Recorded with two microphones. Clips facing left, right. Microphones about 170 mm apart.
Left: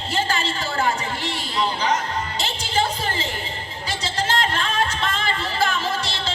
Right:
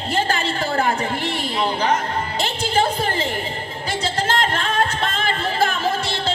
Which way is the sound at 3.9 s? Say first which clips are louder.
Right 3 dB; 55° right (ahead or behind).